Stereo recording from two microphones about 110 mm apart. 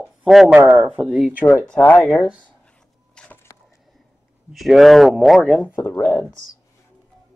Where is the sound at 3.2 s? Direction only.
10° left (ahead or behind).